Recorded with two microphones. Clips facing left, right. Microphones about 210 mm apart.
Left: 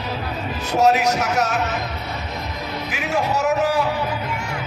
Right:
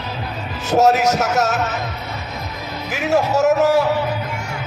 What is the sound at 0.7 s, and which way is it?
Speech, 45° right (ahead or behind).